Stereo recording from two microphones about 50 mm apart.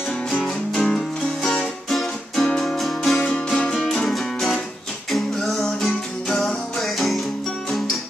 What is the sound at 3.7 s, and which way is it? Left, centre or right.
Music, centre.